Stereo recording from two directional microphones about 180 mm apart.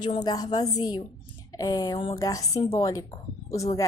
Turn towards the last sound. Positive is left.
turn(degrees=20)  # may be behind; listen again after turning